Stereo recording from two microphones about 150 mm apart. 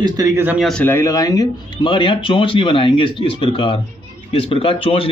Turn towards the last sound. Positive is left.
turn(degrees=40)  # may be behind; listen again after turning